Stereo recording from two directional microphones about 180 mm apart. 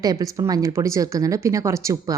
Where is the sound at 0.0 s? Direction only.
20° right (ahead or behind).